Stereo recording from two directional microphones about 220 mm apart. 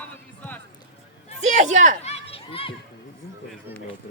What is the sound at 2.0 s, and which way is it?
Children playing, 30° left (ahead or behind).